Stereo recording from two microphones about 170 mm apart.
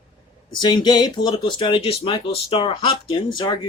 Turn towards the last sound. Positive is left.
turn(degrees=25)  # may be behind; listen again after turning